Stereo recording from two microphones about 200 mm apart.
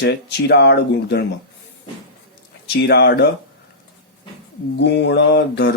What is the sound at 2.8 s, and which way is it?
Speech, 55° left (ahead or behind).